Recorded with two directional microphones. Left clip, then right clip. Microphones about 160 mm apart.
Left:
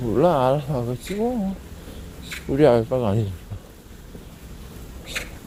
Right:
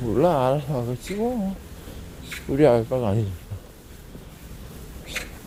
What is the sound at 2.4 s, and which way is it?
Speech, 10° right (ahead or behind).